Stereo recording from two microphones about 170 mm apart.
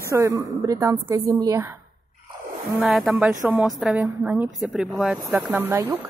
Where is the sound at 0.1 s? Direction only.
20° right (ahead or behind).